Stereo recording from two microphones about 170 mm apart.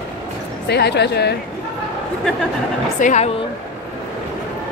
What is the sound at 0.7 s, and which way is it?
Speech, 80° left.